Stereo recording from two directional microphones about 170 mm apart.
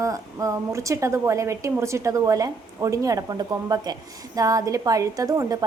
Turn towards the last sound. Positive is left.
turn(degrees=-20)  # may be behind; listen again after turning